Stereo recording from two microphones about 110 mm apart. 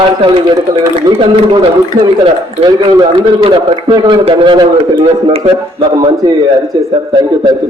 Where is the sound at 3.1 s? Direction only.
50° right (ahead or behind).